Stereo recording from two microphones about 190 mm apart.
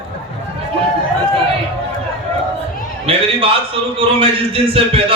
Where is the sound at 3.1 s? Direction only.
30° right (ahead or behind).